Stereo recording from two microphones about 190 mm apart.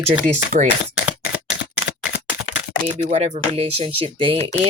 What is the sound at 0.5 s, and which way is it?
Speech, 45° right (ahead or behind).